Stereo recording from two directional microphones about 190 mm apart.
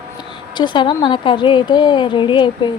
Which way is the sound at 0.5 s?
25° left (ahead or behind).